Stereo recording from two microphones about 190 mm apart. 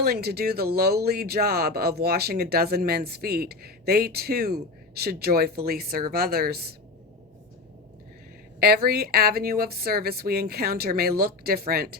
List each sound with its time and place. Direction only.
0.0 s speech: 55° right (ahead or behind)
8.6 s speech: 55° right (ahead or behind)